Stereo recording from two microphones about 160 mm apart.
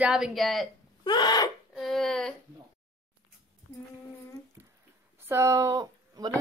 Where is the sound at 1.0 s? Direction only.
25° left (ahead or behind).